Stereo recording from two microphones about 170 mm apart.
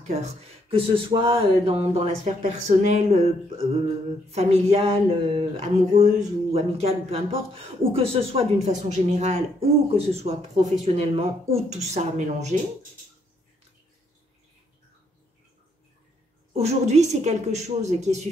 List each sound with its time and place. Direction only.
0.1 s speech: 40° right (ahead or behind)
16.5 s speech: 40° right (ahead or behind)